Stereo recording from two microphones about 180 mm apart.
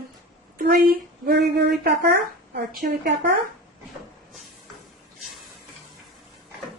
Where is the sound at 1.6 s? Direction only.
70° right (ahead or behind); by 3.1 s 55° right (ahead or behind).